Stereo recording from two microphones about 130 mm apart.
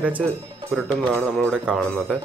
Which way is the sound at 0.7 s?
Centre (ahead or behind).